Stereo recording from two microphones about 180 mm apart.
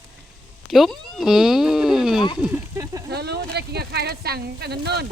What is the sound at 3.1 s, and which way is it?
Speech, 65° right (ahead or behind).